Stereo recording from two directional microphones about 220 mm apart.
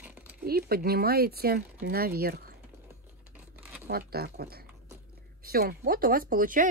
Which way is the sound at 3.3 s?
5° right (ahead or behind).